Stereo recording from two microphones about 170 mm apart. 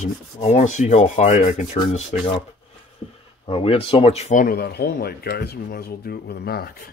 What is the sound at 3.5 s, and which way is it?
Speech, 35° left (ahead or behind).